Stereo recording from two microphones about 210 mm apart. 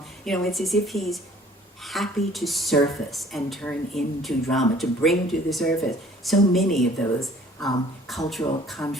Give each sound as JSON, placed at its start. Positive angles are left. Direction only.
{"t": 0.3, "sound": "a woman's voice", "side_deg": 0}